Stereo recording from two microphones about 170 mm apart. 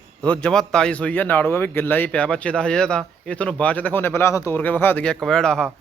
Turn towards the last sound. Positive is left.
turn(degrees=5)  # may be behind; listen again after turning